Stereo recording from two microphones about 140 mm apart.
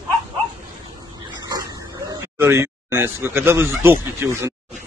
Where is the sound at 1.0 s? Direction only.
30° right (ahead or behind).